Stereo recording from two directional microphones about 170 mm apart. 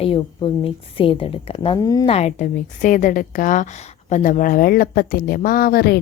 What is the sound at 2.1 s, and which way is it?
A woman's voice, 40° left (ahead or behind).